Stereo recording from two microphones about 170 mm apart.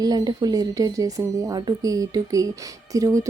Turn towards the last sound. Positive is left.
turn(degrees=-20)  # may be behind; listen again after turning